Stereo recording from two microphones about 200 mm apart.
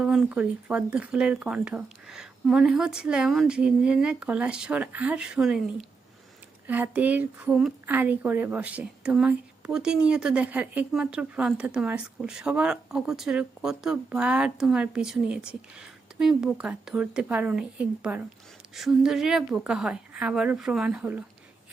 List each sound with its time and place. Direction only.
0.0 s speech: 5° right (ahead or behind)